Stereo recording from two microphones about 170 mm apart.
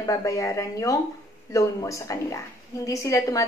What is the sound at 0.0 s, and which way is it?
A woman's voice, 20° left (ahead or behind).